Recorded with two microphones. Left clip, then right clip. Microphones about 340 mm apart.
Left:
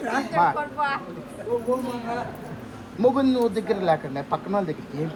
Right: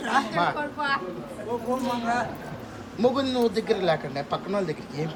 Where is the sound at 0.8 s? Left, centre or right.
Left.